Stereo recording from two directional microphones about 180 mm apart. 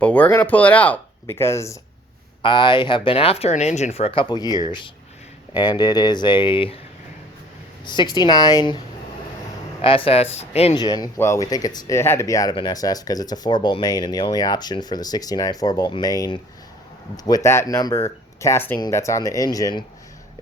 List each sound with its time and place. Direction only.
0.0 s speech: 10° left (ahead or behind)
2.4 s speech: 25° left (ahead or behind)
7.9 s speech: 25° left (ahead or behind)
9.8 s speech: 30° left (ahead or behind)
10.8 s speech: 20° left (ahead or behind)